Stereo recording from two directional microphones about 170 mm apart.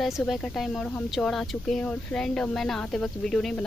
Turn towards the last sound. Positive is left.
turn(degrees=5)  # may be behind; listen again after turning